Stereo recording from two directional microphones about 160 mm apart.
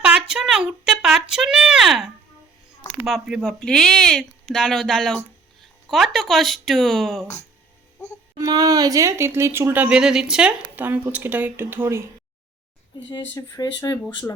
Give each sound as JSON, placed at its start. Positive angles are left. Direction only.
{"t": 0.0, "sound": "a sound", "side_deg": -5}
{"t": 3.1, "sound": "speech", "side_deg": 0}
{"t": 8.0, "sound": "a child's voice", "side_deg": 20}
{"t": 8.4, "sound": "speech", "side_deg": -25}
{"t": 13.4, "sound": "speech", "side_deg": 20}